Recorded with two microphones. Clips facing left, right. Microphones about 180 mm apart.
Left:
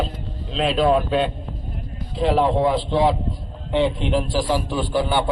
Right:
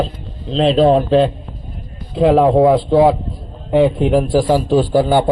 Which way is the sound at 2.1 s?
50° right (ahead or behind).